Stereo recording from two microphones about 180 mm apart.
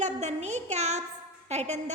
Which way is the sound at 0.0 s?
40° right (ahead or behind).